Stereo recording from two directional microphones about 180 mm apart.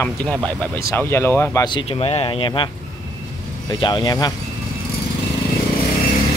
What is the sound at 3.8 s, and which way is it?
Speech, 25° left (ahead or behind).